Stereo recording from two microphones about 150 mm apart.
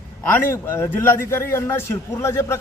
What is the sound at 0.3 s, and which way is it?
A man's voice, 15° left (ahead or behind).